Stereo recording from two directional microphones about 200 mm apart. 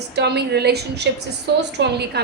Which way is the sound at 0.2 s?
55° right (ahead or behind).